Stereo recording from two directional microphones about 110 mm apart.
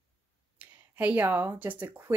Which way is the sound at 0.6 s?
15° right (ahead or behind).